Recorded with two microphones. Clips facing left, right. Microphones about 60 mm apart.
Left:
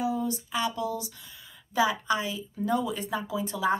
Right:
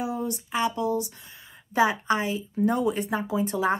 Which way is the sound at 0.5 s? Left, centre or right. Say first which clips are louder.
Right 7 dB; right.